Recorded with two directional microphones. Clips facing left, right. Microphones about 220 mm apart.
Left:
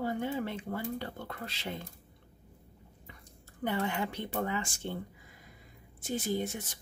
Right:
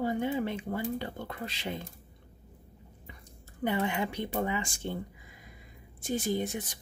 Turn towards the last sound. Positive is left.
turn(degrees=-15)  # may be behind; listen again after turning